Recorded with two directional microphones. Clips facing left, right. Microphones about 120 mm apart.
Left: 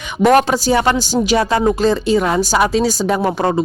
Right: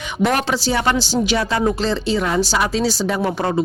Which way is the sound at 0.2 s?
45° left (ahead or behind).